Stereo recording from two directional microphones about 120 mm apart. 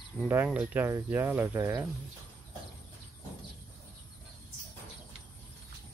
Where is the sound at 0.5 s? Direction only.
15° right (ahead or behind).